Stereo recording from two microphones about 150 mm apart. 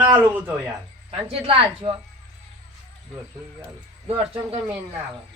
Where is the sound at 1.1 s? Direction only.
40° right (ahead or behind).